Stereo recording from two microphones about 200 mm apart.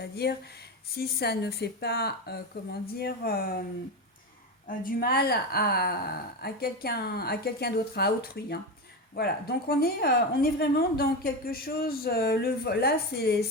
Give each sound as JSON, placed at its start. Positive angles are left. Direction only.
{"t": 0.0, "sound": "a woman's voice", "side_deg": 55}
{"t": 4.8, "sound": "a woman's voice", "side_deg": 45}